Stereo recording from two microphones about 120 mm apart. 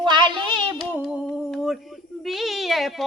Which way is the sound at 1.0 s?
5° right (ahead or behind).